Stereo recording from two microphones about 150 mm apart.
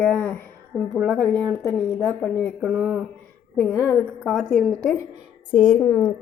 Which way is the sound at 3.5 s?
15° left (ahead or behind).